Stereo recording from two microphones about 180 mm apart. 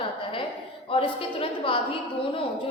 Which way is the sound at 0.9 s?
30° left (ahead or behind).